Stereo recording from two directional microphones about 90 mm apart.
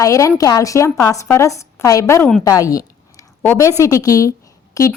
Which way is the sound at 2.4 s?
40° left (ahead or behind).